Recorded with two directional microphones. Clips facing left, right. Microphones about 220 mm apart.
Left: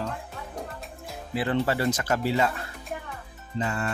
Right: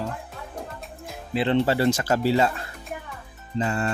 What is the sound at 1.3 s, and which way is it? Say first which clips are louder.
Speech: right 4 dB; 25° right (ahead or behind).